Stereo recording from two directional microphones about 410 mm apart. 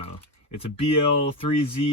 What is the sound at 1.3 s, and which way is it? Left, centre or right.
Speech, centre.